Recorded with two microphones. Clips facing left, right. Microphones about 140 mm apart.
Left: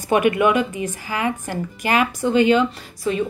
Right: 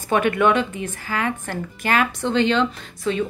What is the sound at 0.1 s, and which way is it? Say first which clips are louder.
A woman's voice: left 1 dB; 10° left (ahead or behind).